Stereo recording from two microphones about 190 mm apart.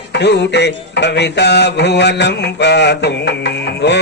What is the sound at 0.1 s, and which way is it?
Mantra, 65° left (ahead or behind).